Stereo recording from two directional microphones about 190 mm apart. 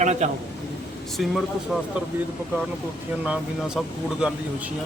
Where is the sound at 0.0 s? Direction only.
35° right (ahead or behind).